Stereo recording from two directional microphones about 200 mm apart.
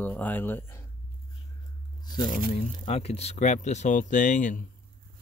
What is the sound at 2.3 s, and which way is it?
Speech, 30° left (ahead or behind).